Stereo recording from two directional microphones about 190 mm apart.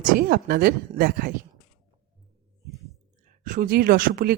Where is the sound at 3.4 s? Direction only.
45° right (ahead or behind).